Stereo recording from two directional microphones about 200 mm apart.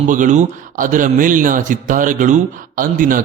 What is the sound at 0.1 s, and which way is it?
Speech, 40° right (ahead or behind).